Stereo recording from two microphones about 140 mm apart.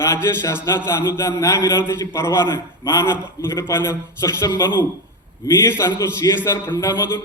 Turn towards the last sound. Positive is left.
turn(degrees=20)  # may be behind; listen again after turning